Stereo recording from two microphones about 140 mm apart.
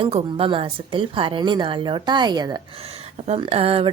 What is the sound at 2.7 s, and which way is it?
Speech, 45° right (ahead or behind).